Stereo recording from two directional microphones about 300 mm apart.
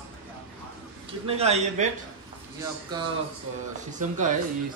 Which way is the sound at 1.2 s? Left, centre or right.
Right.